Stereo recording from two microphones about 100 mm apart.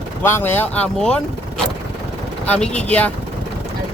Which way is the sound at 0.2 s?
25° left (ahead or behind).